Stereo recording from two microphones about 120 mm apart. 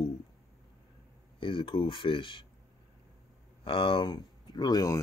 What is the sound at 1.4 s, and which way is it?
Speech, 45° left (ahead or behind).